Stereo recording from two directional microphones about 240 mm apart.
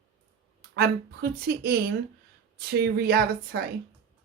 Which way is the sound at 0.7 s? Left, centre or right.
Right.